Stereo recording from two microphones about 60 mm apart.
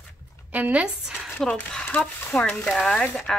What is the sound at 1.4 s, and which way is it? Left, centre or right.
Speech, centre.